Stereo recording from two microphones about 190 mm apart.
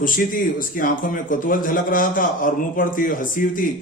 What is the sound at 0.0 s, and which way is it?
A man's voice, 45° left (ahead or behind).